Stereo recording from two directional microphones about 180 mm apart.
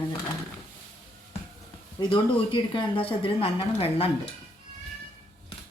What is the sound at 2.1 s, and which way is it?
Speech, 25° left (ahead or behind).